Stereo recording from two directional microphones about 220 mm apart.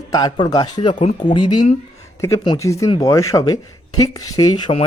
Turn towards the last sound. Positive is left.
turn(degrees=25)  # may be behind; listen again after turning